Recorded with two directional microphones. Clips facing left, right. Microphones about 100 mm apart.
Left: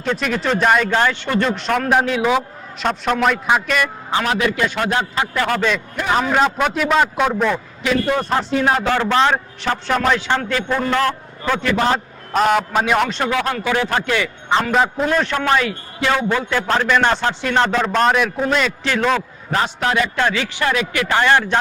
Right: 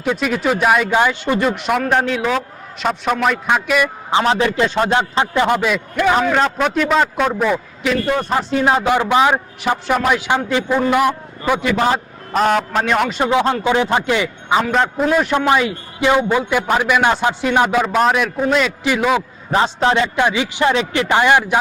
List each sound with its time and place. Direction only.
0.0 s a man's voice: 5° right (ahead or behind)
4.1 s a man's voice: 30° right (ahead or behind)
5.5 s a man's voice: 10° right (ahead or behind)
6.1 s a man's voice: 5° left (ahead or behind)
8.6 s a man's voice: 15° right (ahead or behind)
12.3 s a man's voice: centre (ahead or behind)
13.2 s a man's voice: 20° right (ahead or behind)
14.5 s a man's voice: centre (ahead or behind)
15.3 s a man's voice: 15° right (ahead or behind)
19.5 s a man's voice: 25° right (ahead or behind)